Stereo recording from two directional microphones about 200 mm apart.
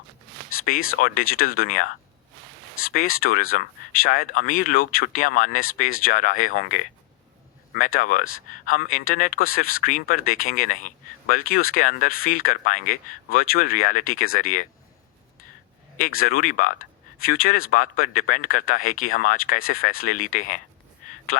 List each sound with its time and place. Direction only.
0.9 s speech: 45° left (ahead or behind)
3.2 s speech: 45° left (ahead or behind)
7.9 s speech: 40° left (ahead or behind)
8.2 s speech: 90° left
8.6 s speech: 45° left (ahead or behind)
16.0 s speech: 45° left (ahead or behind)